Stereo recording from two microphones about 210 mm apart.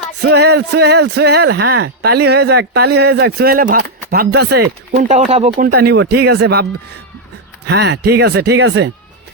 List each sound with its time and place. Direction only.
0.2 s speech: 55° right (ahead or behind)
4.9 s speech: 35° right (ahead or behind)
5.5 s speech: 45° right (ahead or behind)
7.7 s speech: 50° right (ahead or behind)